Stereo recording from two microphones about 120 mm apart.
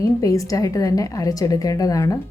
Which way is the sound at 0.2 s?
30° left (ahead or behind).